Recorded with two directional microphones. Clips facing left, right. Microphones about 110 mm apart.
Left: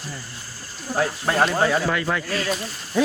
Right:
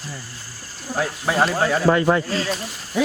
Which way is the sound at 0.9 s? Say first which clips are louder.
Even; centre (ahead or behind).